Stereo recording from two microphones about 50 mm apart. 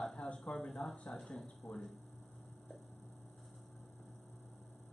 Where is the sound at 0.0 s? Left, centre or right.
Centre.